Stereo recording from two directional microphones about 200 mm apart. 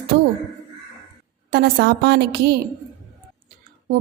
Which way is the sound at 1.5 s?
55° right (ahead or behind).